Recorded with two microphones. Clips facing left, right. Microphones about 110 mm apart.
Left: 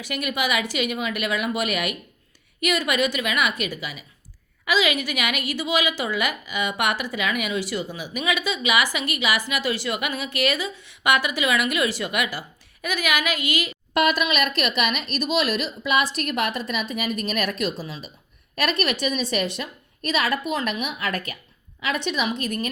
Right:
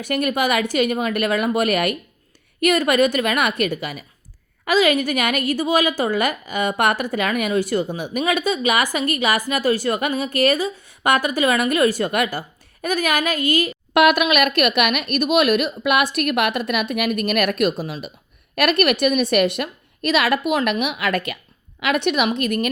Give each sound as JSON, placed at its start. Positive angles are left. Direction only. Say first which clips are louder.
{"t": 0.0, "sound": "a woman's voice", "louder": "right 6 dB", "side_deg": -50}
{"t": 13.9, "sound": "a woman's voice", "louder": "right 6 dB", "side_deg": -65}